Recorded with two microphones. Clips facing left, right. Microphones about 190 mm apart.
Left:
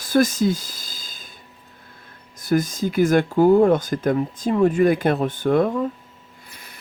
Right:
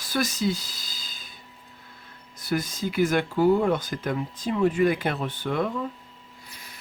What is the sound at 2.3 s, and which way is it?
Speech, 45° left (ahead or behind).